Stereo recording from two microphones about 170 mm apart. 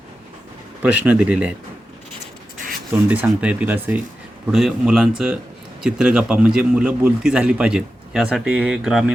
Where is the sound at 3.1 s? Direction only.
10° right (ahead or behind).